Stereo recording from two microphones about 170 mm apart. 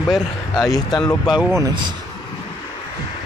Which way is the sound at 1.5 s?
20° right (ahead or behind).